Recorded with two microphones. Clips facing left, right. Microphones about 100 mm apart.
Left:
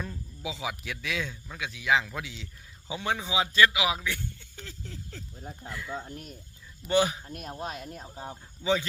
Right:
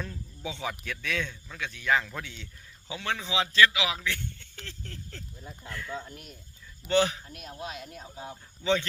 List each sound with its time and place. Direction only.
0.0 s speech: 5° left (ahead or behind)
2.9 s speech: 15° left (ahead or behind)
6.1 s speech: 40° left (ahead or behind)
6.8 s speech: 10° left (ahead or behind)
7.3 s speech: 40° left (ahead or behind)
8.6 s speech: 10° left (ahead or behind)